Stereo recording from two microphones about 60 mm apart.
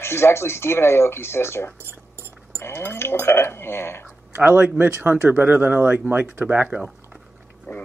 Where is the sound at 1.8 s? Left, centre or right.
Right.